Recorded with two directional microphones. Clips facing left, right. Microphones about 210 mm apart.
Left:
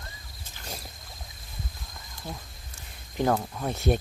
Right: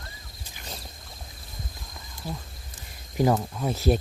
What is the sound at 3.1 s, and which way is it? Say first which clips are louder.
Speech: right 2 dB; 5° right (ahead or behind).